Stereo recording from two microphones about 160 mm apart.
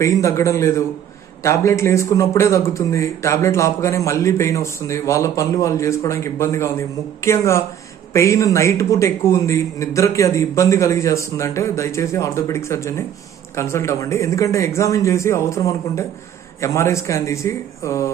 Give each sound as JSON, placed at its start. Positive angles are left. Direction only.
{"t": 0.0, "sound": "a man's voice", "side_deg": 20}